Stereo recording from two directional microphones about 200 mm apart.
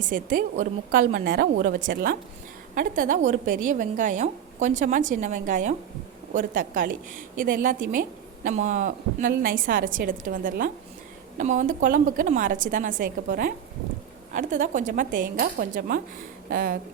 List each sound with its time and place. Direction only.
0.0 s a woman's voice: 40° right (ahead or behind)